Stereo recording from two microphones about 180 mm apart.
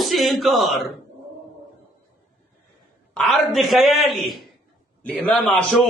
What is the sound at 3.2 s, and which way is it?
A man's voice, centre (ahead or behind).